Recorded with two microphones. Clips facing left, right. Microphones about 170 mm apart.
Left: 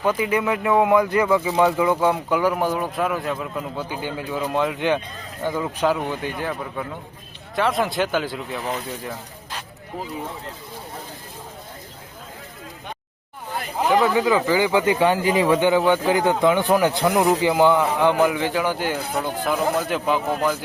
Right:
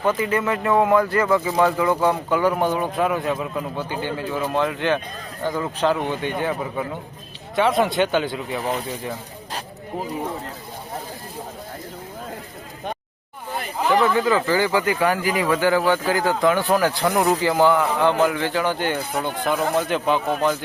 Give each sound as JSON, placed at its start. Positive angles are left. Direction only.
{"t": 0.0, "sound": "speech", "side_deg": 10}
{"t": 3.9, "sound": "speech", "side_deg": 10}
{"t": 14.0, "sound": "speech", "side_deg": 15}